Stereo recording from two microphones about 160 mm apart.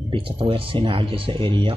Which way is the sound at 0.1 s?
35° right (ahead or behind).